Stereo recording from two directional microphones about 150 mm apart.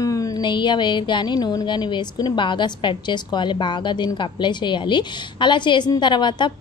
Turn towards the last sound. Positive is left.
turn(degrees=30)  # may be behind; listen again after turning